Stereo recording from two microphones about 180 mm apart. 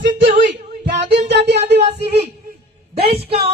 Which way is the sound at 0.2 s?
80° right.